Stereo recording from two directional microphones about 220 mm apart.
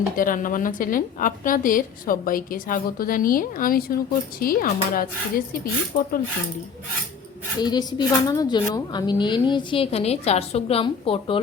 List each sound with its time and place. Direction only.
0.2 s a woman's voice: 40° left (ahead or behind)
7.6 s a woman's voice: 20° left (ahead or behind)